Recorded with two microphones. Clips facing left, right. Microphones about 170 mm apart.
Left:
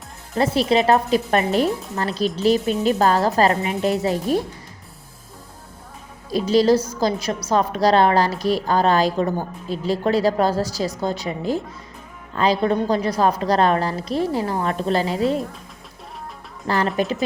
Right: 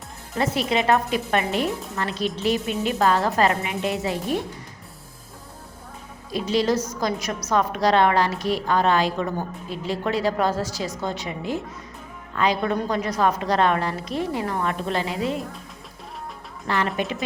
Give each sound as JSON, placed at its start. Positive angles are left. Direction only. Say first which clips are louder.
{"t": 0.3, "sound": "a woman's voice", "louder": "left 5 dB", "side_deg": 35}
{"t": 6.3, "sound": "a woman's voice", "louder": "left 6 dB", "side_deg": 35}
{"t": 16.6, "sound": "a woman's voice", "louder": "left 4 dB", "side_deg": 35}